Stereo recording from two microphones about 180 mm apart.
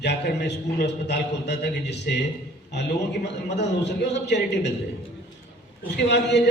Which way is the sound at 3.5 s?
70° left (ahead or behind).